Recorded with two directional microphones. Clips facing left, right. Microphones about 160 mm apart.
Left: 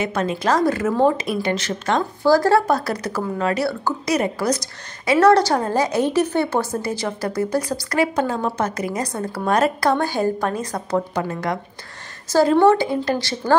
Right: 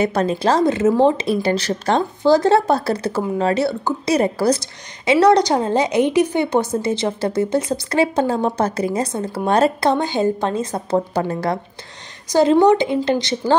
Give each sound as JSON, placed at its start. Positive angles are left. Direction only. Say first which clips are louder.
{"t": 0.0, "sound": "speech", "louder": "right 4 dB", "side_deg": -35}
{"t": 2.2, "sound": "speech", "louder": "right 1 dB", "side_deg": -20}
{"t": 12.3, "sound": "speech", "louder": "right 1 dB", "side_deg": -20}